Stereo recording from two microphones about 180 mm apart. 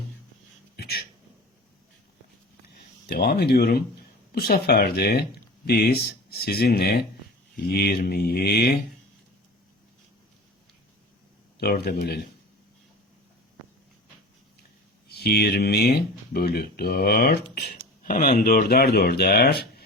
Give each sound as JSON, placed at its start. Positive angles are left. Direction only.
{"t": 0.8, "sound": "a sound", "side_deg": 60}
{"t": 3.1, "sound": "speech", "side_deg": 60}
{"t": 11.6, "sound": "speech", "side_deg": 60}
{"t": 15.0, "sound": "speech", "side_deg": 60}